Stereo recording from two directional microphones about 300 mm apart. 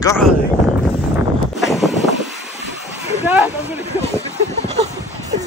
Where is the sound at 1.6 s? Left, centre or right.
Centre.